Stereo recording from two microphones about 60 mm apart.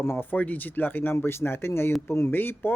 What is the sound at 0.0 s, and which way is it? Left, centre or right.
Speech, left.